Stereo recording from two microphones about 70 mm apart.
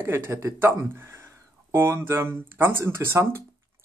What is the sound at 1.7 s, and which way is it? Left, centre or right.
Speech, right.